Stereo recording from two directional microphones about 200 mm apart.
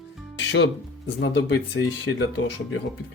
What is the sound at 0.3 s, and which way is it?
Music, 65° left (ahead or behind).